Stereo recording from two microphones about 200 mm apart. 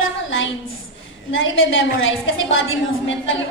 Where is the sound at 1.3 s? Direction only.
70° left (ahead or behind).